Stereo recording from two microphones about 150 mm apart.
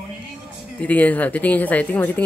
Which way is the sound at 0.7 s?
10° left (ahead or behind).